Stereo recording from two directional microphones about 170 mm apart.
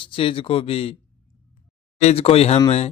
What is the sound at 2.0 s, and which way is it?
Speech, 35° left (ahead or behind).